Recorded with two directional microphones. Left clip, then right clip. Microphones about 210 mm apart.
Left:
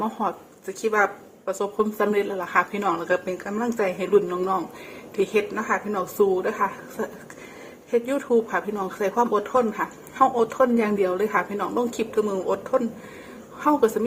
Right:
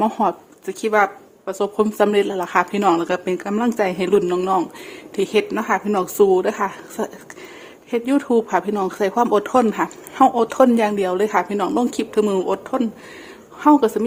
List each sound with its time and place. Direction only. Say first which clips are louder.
0.0 s speech: right 8 dB; 35° right (ahead or behind)